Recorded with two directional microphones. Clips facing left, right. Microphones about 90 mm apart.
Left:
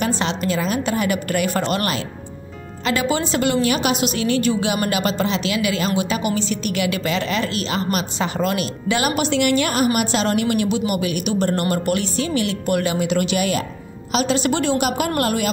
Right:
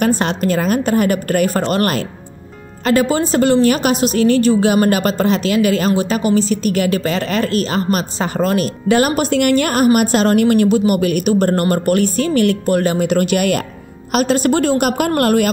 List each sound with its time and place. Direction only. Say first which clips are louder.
0.0 s a woman's voice: right 6 dB; 50° right (ahead or behind)
12.6 s a woman's voice: right 5 dB; 40° right (ahead or behind)